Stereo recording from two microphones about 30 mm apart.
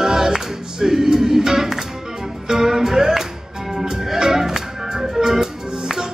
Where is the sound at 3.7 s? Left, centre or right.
Centre.